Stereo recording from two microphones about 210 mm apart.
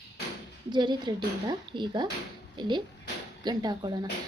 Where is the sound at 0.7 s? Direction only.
20° right (ahead or behind).